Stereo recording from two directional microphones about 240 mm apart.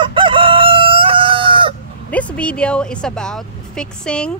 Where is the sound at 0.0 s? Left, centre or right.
Right.